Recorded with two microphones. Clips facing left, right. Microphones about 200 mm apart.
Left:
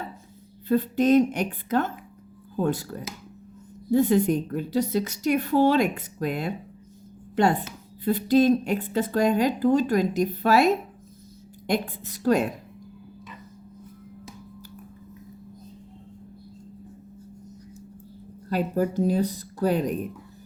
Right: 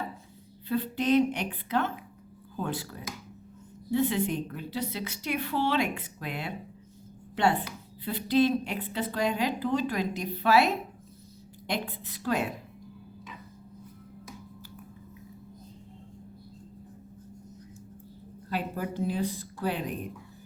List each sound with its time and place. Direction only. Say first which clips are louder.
0.7 s speech: left 6 dB; 45° left (ahead or behind)
11.7 s speech: left 7 dB; 45° left (ahead or behind)
18.4 s speech: left 8 dB; 40° left (ahead or behind)